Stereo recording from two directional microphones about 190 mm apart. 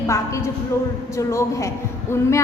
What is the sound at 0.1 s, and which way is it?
A woman's voice, 15° left (ahead or behind).